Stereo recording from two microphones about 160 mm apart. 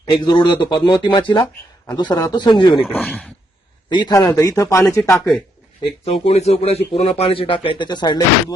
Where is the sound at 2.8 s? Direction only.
5° left (ahead or behind).